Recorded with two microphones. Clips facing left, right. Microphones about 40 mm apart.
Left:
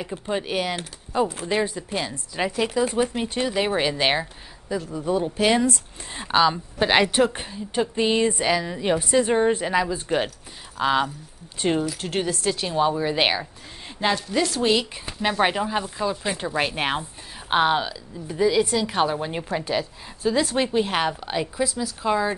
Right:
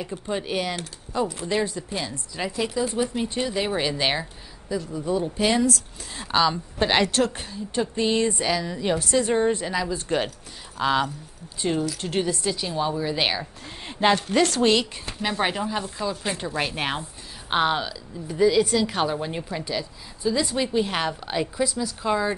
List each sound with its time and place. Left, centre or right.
0.0 s a woman's voice: centre
5.5 s speech: left
6.2 s a woman's voice: centre
9.8 s a woman's voice: centre
13.8 s a sound: centre
14.5 s a woman's voice: centre